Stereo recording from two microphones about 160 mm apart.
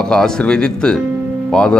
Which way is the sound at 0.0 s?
5° left (ahead or behind).